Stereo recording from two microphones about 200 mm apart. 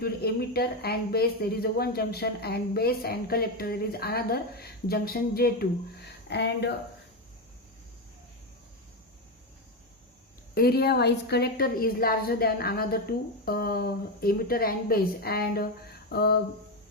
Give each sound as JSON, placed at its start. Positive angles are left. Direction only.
{"t": 0.0, "sound": "a woman's voice", "side_deg": 50}
{"t": 10.5, "sound": "a woman's voice", "side_deg": 50}